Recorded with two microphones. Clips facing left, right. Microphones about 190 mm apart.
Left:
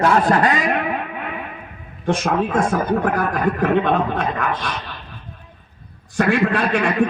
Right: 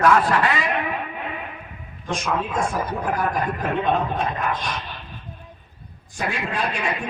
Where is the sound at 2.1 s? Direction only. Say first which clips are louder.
Left 6 dB; 60° left (ahead or behind).